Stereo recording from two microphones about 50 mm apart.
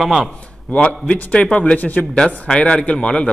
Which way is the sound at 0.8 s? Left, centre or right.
Left.